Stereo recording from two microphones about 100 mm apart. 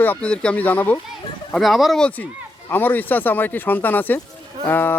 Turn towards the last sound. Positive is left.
turn(degrees=20)  # may be behind; listen again after turning